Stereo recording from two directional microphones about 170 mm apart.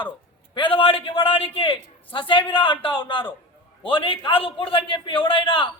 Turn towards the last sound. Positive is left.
turn(degrees=30)  # may be behind; listen again after turning